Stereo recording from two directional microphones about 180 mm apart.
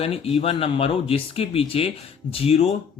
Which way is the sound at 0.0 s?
30° left (ahead or behind).